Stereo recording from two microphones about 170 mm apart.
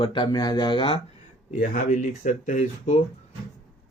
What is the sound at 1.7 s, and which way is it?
Speech, 50° left (ahead or behind).